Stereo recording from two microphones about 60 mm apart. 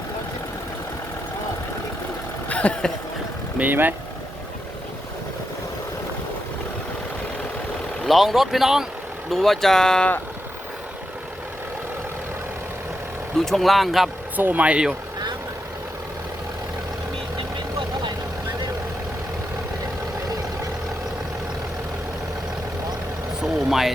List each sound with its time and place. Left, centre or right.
2.5 s a sound: left
3.6 s speech: right
8.0 s speech: centre
9.3 s speech: centre
13.4 s speech: centre
14.3 s speech: right
23.4 s vehicle: centre